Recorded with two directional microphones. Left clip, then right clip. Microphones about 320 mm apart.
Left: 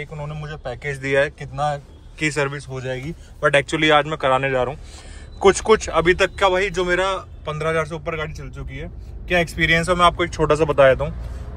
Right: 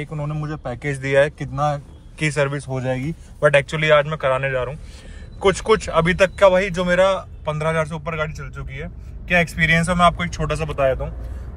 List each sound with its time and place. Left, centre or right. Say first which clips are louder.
0.0 s a man's voice: right 2 dB; centre
10.1 s speech: left 7 dB; centre